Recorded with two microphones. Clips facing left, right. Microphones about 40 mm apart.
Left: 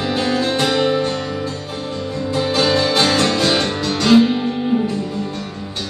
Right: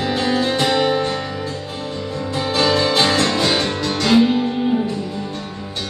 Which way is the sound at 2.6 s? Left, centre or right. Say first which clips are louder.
Right 1 dB; left.